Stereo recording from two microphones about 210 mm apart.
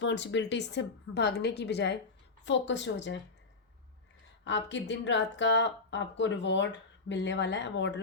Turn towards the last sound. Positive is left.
turn(degrees=55)  # may be behind; listen again after turning